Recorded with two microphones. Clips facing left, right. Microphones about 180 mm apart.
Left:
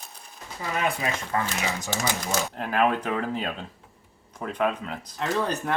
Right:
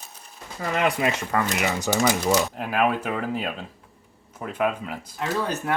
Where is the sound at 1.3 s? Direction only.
70° right (ahead or behind).